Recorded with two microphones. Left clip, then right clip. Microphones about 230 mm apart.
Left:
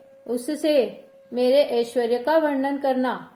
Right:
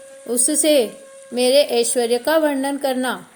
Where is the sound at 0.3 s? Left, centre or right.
Right.